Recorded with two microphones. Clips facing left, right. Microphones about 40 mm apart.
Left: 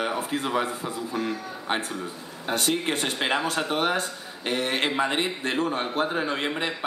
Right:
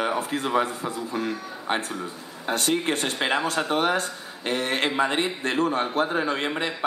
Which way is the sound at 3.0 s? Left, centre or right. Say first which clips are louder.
Right 1 dB; centre.